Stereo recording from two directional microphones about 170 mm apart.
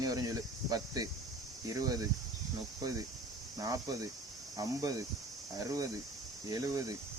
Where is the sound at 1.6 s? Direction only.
20° right (ahead or behind).